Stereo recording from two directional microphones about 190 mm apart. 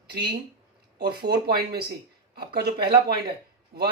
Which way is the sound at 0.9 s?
60° right (ahead or behind).